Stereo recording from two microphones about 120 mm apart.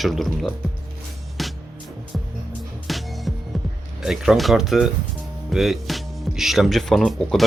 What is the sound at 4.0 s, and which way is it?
Speech, 5° right (ahead or behind).